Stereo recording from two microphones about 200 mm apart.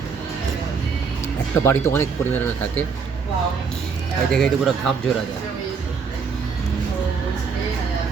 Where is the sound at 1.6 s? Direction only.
10° left (ahead or behind).